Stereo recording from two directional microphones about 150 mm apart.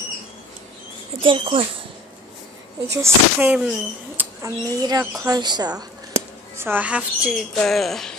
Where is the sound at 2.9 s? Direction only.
15° right (ahead or behind).